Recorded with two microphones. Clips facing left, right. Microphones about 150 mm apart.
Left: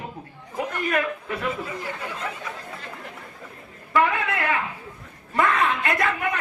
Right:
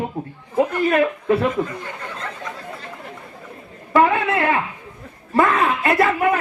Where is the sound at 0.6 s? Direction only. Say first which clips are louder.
Right 8 dB; 30° right (ahead or behind).